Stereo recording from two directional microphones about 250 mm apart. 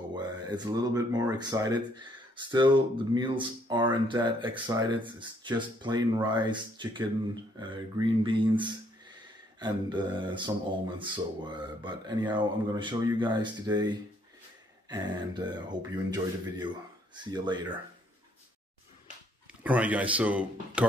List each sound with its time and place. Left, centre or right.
0.1 s speech: centre
19.6 s speech: centre